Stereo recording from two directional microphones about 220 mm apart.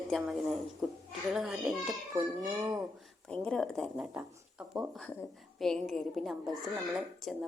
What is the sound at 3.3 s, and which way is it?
A woman's voice, 5° left (ahead or behind).